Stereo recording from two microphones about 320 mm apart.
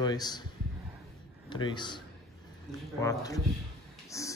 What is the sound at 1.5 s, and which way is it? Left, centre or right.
Speech, centre.